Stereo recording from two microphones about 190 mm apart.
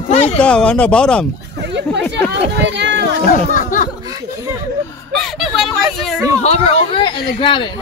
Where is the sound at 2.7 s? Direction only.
65° right (ahead or behind).